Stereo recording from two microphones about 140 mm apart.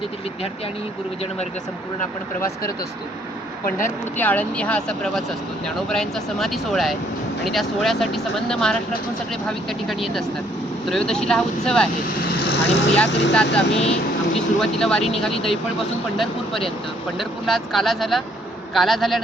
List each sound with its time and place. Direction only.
3.7 s speech: 75° left (ahead or behind)
4.2 s speech: 10° left (ahead or behind)
11.9 s speech: 90° left
12.5 s speech: 10° left (ahead or behind)